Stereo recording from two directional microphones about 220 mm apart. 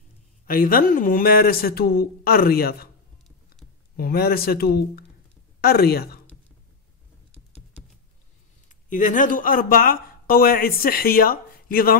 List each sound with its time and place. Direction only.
0.5 s speech: 40° left (ahead or behind)
3.9 s speech: 45° left (ahead or behind)
8.8 s a man's voice: 35° left (ahead or behind)